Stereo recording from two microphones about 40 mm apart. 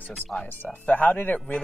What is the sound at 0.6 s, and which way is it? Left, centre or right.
Speech, left.